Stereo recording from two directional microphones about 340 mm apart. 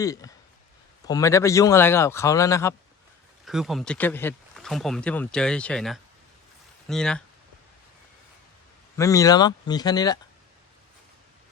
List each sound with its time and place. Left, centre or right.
0.0 s a man's voice: centre
9.0 s a man's voice: centre